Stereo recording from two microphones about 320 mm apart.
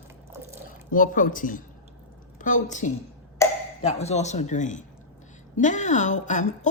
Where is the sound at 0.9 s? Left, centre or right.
Left.